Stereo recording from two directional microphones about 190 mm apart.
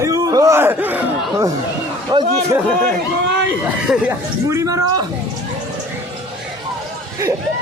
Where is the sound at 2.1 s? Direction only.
25° right (ahead or behind).